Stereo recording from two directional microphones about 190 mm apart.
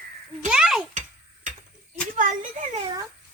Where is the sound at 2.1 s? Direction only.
40° right (ahead or behind).